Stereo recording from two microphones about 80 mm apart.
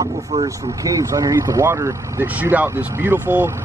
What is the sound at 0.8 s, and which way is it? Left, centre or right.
Speech, right.